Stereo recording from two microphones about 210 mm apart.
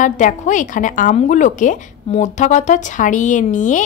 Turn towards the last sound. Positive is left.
turn(degrees=35)  # may be behind; listen again after turning